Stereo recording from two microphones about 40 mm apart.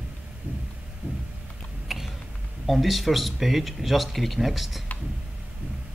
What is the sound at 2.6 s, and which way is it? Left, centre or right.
Speech, centre.